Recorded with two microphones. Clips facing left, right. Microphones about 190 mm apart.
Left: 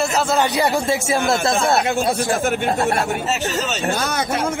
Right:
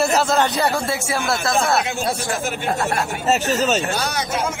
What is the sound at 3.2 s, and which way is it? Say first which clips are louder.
Speech: right 3 dB; 40° right (ahead or behind).